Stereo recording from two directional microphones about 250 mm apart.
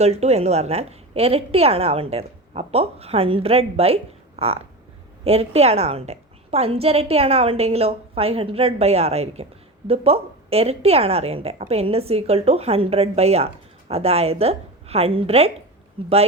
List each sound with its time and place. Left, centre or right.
0.0 s a woman's voice: right